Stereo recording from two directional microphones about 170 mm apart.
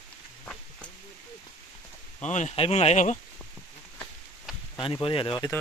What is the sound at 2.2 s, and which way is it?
Speech, 45° left (ahead or behind).